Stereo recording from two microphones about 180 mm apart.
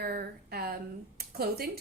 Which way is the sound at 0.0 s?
60° right (ahead or behind).